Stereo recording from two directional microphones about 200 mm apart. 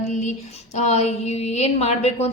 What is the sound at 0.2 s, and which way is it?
A woman's voice, 35° left (ahead or behind).